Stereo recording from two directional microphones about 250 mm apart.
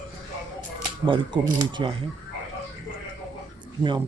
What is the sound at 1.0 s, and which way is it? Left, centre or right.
Speech, centre.